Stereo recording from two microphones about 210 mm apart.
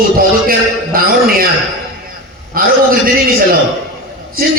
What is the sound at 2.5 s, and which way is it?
Speech, 45° right (ahead or behind).